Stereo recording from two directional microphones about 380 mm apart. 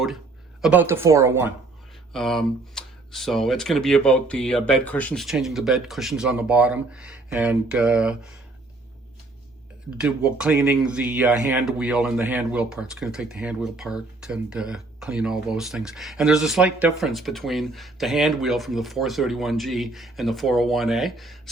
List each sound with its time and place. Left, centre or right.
0.6 s a woman's voice: centre
10.0 s speech: centre